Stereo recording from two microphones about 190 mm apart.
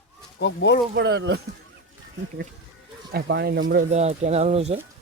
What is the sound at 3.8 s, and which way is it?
Speech, 35° right (ahead or behind).